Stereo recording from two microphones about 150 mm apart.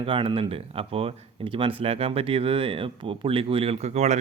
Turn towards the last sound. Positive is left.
turn(degrees=-50)  # may be behind; listen again after turning